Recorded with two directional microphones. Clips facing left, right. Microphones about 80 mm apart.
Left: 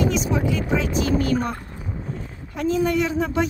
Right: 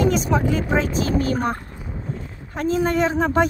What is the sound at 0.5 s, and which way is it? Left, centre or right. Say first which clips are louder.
Speech: right 2 dB; right.